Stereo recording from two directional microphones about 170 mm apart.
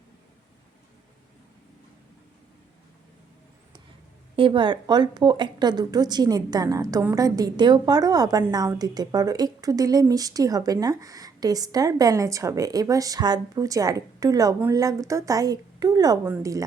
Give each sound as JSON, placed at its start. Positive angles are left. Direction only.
{"t": 4.4, "sound": "a woman's voice", "side_deg": -30}